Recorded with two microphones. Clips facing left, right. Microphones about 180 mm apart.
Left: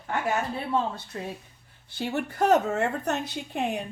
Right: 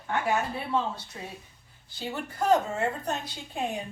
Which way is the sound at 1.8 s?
65° left (ahead or behind).